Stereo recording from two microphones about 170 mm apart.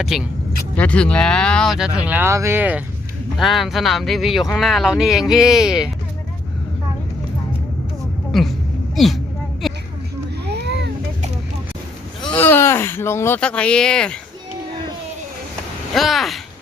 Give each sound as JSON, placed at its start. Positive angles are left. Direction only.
{"t": 0.0, "sound": "speech", "side_deg": 0}
{"t": 8.3, "sound": "speech", "side_deg": 0}
{"t": 9.0, "sound": "a sound", "side_deg": 0}
{"t": 10.4, "sound": "a sound", "side_deg": -80}
{"t": 12.5, "sound": "speech", "side_deg": 15}
{"t": 15.9, "sound": "speech", "side_deg": 0}